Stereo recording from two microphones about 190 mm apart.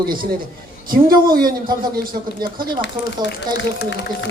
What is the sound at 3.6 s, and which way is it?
Speech, 70° left (ahead or behind).